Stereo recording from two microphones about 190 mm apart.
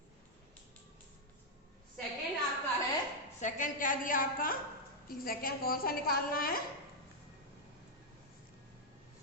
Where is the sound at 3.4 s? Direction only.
45° left (ahead or behind).